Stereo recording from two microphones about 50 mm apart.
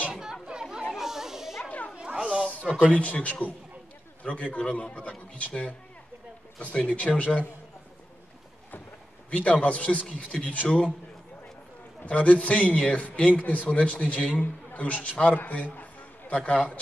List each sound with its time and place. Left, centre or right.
0.1 s chatter: centre
0.9 s snake: centre
1.7 s a sound: left
2.0 s cat: right
2.3 s a sound: left
2.6 s speech: right
2.9 s a man's voice: left
6.6 s a man's voice: left
9.3 s a man's voice: left
12.1 s a man's voice: left